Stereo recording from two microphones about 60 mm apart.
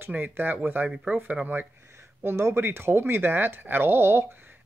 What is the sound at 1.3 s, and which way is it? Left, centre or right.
Speech, right.